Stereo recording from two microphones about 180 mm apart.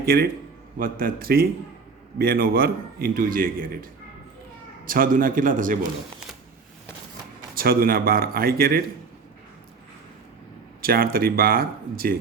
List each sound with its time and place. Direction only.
0.0 s a man's voice: 55° right (ahead or behind)
4.9 s a man's voice: 50° right (ahead or behind)
7.5 s a man's voice: 55° right (ahead or behind)
10.8 s a man's voice: 55° right (ahead or behind)